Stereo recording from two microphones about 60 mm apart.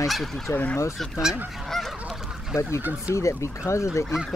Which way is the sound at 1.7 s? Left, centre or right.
Centre.